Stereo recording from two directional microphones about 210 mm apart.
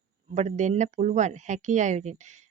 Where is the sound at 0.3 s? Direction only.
35° right (ahead or behind).